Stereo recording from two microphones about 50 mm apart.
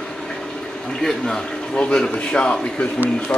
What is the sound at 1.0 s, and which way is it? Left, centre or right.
A man's voice, centre.